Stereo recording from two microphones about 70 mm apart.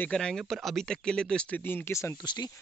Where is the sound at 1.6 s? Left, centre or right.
Left.